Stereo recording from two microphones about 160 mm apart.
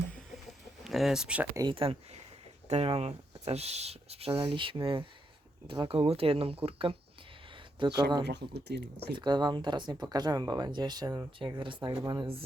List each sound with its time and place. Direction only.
0.9 s speech: centre (ahead or behind)
1.5 s speech: 30° right (ahead or behind)
7.5 s a sound: 30° right (ahead or behind)
8.2 s speech: 90° right
9.1 s speech: 25° right (ahead or behind)